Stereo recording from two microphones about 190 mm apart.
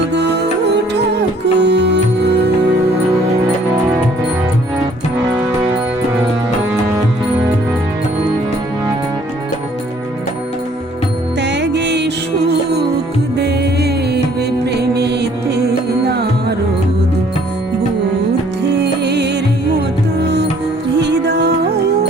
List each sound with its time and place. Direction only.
0.1 s music: 65° right (ahead or behind)
1.5 s music: 60° right (ahead or behind)
11.3 s music: 65° right (ahead or behind)
13.3 s music: 60° right (ahead or behind)
18.8 s music: 65° right (ahead or behind)